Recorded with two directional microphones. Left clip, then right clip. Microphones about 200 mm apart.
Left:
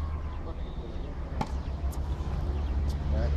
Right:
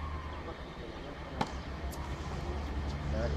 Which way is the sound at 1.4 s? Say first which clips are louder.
Even; 10° right (ahead or behind).